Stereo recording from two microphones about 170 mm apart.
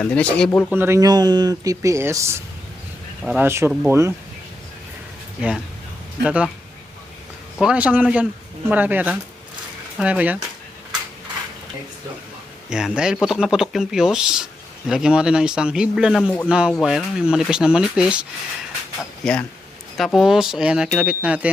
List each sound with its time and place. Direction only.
0.0 s speech: 5° left (ahead or behind)
0.7 s speech: 15° right (ahead or behind)
6.2 s speech: 5° right (ahead or behind)
7.6 s speech: 5° right (ahead or behind)
12.7 s speech: 5° right (ahead or behind)
19.2 s speech: 5° left (ahead or behind)